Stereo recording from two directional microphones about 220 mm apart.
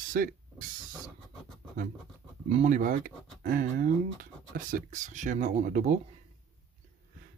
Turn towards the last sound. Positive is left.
turn(degrees=-35)  # may be behind; listen again after turning